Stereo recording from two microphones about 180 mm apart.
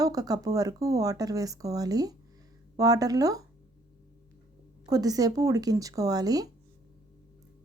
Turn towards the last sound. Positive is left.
turn(degrees=-20)  # may be behind; listen again after turning